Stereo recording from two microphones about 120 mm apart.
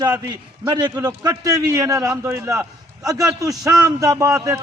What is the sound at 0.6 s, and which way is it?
A man's voice, 35° right (ahead or behind).